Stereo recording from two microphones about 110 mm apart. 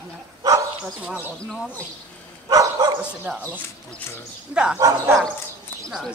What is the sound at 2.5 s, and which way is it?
Dog, 30° right (ahead or behind).